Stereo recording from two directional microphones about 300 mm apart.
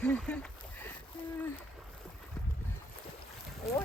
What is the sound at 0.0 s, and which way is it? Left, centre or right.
Speech, centre.